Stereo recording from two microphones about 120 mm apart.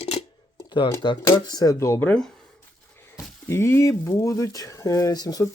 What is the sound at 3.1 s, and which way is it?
Speech, 20° left (ahead or behind).